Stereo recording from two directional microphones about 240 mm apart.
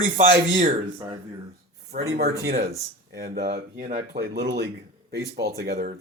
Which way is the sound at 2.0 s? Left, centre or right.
Right.